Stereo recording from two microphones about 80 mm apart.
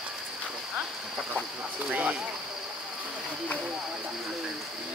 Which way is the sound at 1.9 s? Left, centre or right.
Centre.